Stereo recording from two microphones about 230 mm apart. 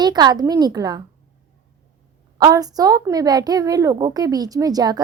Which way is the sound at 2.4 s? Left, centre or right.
Centre.